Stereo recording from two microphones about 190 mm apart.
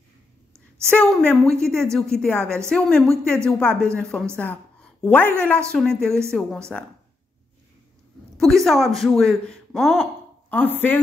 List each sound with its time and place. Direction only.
0.8 s speech: 5° left (ahead or behind)
4.4 s a sound: 5° left (ahead or behind)
5.7 s speech: 5° left (ahead or behind)
8.4 s speech: centre (ahead or behind)